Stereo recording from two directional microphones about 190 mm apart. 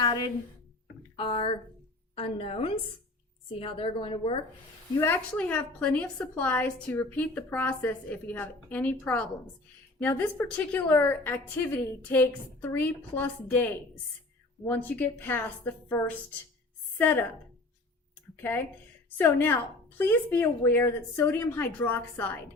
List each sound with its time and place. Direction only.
0.0 s a sound: 20° left (ahead or behind)
1.1 s a woman's voice: 25° left (ahead or behind)
4.9 s a woman's voice: 10° left (ahead or behind)
14.7 s a woman's voice: 10° left (ahead or behind)
19.1 s a woman's voice: 10° left (ahead or behind)